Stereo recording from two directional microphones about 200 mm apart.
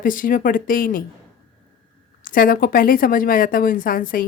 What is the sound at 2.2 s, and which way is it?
A woman's voice, 45° left (ahead or behind).